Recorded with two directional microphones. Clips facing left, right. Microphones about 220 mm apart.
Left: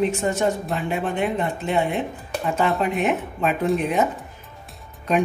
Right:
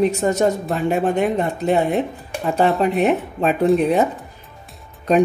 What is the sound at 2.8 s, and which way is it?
A woman's voice, 35° right (ahead or behind).